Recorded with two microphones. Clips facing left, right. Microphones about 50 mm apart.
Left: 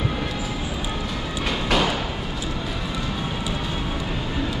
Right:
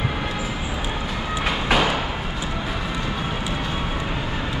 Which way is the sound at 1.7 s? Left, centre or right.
Centre.